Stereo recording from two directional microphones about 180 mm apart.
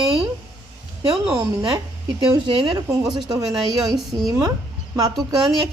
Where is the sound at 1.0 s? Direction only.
20° right (ahead or behind).